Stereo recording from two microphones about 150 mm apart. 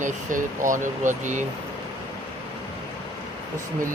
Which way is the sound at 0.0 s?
60° right (ahead or behind).